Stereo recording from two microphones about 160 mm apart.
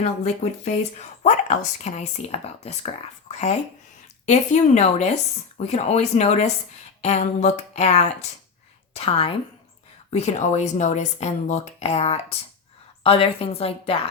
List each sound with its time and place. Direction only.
0.6 s speech: 45° left (ahead or behind)
4.3 s a woman's voice: 45° left (ahead or behind)